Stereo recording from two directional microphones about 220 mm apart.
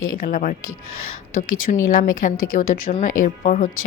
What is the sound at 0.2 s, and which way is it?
Speech, 40° left (ahead or behind).